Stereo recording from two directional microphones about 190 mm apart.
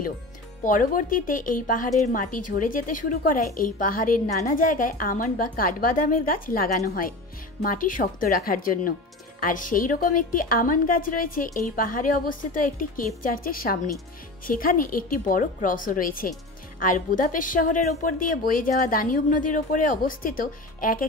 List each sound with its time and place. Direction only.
0.7 s a woman's voice: 45° left (ahead or behind)